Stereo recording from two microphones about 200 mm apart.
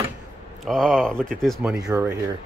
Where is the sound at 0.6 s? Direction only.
Centre (ahead or behind).